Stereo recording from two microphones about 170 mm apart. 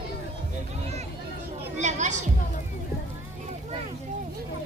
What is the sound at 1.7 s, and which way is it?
Chatter, 45° right (ahead or behind).